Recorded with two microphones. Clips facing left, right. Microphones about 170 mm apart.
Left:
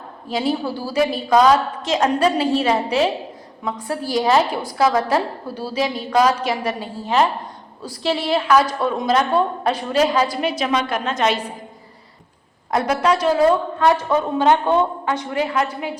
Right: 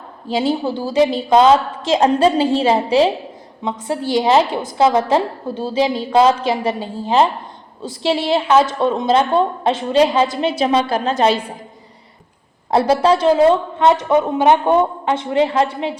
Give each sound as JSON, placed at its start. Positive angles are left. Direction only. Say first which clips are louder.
{"t": 0.3, "sound": "a woman's voice", "louder": "right 3 dB", "side_deg": -25}
{"t": 12.7, "sound": "a woman's voice", "louder": "right 5 dB", "side_deg": -30}